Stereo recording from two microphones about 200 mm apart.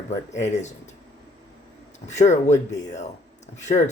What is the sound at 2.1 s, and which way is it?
Speech, 35° left (ahead or behind).